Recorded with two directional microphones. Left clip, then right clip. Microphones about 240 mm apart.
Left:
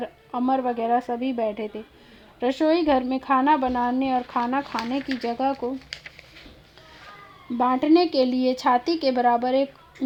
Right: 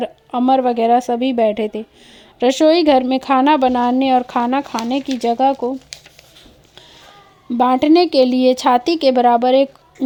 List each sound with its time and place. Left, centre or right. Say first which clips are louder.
0.0 s speech: right 9 dB; right
7.5 s speech: right 7 dB; right